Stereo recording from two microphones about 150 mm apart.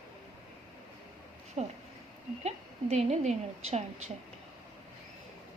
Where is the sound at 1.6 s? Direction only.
40° right (ahead or behind).